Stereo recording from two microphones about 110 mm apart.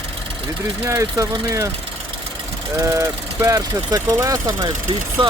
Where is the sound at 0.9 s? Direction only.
25° right (ahead or behind).